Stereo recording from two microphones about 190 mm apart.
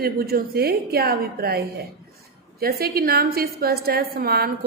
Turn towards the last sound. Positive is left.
turn(degrees=-55)  # may be behind; listen again after turning